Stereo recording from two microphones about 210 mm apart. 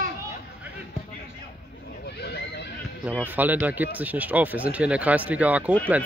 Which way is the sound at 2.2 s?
50° left (ahead or behind).